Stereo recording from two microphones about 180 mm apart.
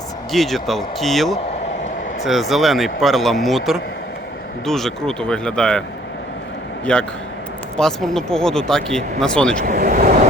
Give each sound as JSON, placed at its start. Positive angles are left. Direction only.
{"t": 0.3, "sound": "speech", "side_deg": 0}
{"t": 6.9, "sound": "speech", "side_deg": 5}
{"t": 9.6, "sound": "speech", "side_deg": -50}